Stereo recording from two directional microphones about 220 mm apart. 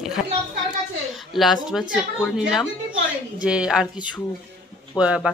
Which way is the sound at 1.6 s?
Centre (ahead or behind).